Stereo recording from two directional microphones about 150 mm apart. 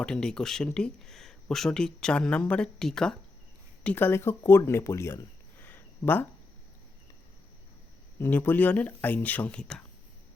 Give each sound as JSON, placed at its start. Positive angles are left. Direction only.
{"t": 0.0, "sound": "speech", "side_deg": 5}
{"t": 3.8, "sound": "speech", "side_deg": 15}
{"t": 8.2, "sound": "speech", "side_deg": 15}